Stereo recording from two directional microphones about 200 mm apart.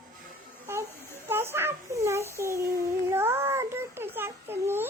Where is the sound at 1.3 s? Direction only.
10° right (ahead or behind).